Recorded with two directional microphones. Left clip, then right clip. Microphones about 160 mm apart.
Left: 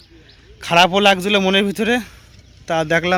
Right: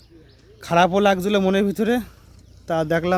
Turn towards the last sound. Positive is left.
turn(degrees=0)  # may be behind; listen again after turning